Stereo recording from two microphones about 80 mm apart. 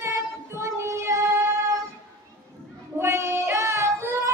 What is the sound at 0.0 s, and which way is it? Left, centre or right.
Child singing, right.